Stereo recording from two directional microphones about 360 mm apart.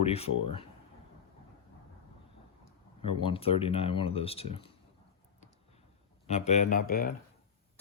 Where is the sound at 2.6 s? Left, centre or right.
Centre.